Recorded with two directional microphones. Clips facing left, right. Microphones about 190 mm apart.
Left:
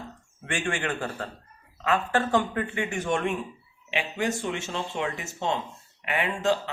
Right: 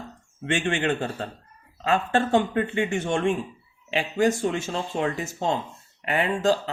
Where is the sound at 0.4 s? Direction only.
25° right (ahead or behind).